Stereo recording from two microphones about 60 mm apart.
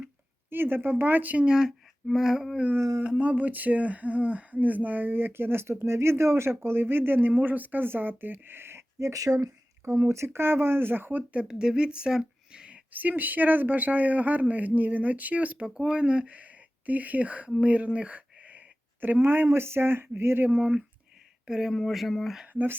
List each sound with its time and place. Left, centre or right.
0.5 s speech: right
1.5 s speech: centre
3.0 s speech: right
9.0 s speech: right
9.4 s speech: right
11.3 s speech: centre
12.9 s speech: right
19.2 s speech: right
20.6 s speech: centre
22.5 s speech: right